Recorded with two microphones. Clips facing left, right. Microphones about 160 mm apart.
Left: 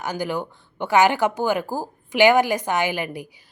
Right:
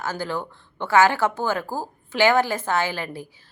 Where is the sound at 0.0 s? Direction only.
15° left (ahead or behind).